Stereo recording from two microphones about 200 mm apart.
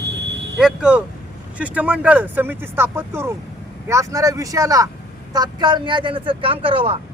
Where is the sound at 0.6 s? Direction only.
5° right (ahead or behind).